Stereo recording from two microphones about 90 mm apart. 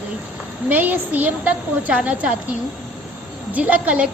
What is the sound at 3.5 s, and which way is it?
Speech, 15° right (ahead or behind).